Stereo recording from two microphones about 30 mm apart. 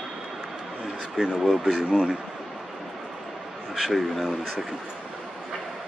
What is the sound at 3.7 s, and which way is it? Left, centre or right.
Speech, centre.